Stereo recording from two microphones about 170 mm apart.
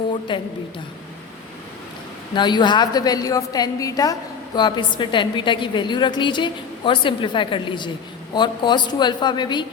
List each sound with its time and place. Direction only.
0.1 s a woman's voice: 30° left (ahead or behind)
2.3 s a woman's voice: 25° left (ahead or behind)